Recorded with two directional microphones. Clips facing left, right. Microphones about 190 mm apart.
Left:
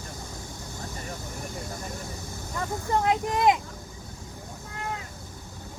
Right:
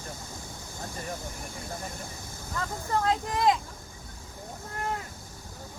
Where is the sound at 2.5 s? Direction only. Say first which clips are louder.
Left 3 dB; 20° left (ahead or behind).